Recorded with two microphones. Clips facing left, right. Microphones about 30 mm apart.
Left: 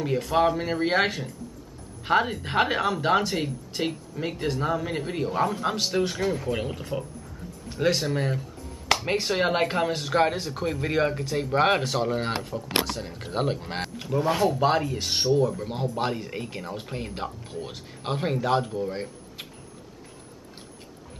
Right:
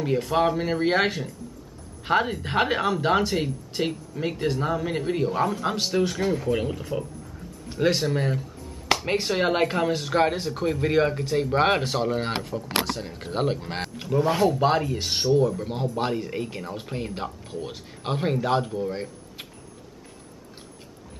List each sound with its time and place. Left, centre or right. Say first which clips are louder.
0.0 s speech: even; centre